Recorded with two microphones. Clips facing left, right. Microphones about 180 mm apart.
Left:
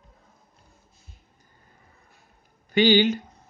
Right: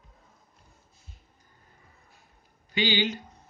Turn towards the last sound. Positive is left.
turn(degrees=50)  # may be behind; listen again after turning